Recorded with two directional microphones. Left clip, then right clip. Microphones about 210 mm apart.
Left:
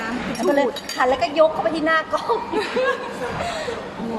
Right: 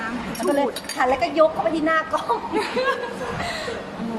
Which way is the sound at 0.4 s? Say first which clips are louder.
Left 2 dB; 20° left (ahead or behind).